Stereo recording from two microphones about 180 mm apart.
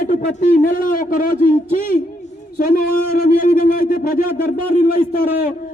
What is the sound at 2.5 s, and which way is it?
A man's voice, 55° left (ahead or behind).